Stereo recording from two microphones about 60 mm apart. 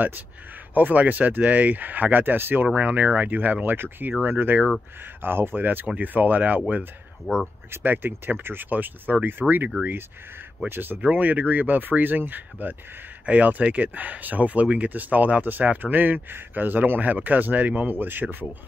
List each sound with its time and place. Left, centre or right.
0.7 s speech: right
2.7 s speech: right
7.7 s speech: right
10.7 s speech: right